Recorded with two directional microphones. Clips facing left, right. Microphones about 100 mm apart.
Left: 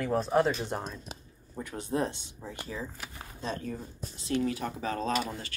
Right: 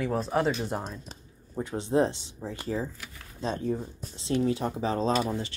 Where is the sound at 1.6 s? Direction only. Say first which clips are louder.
Right 6 dB; 25° right (ahead or behind).